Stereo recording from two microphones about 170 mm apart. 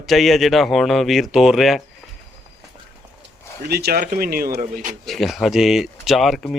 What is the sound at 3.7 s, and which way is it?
Speech, 65° right (ahead or behind).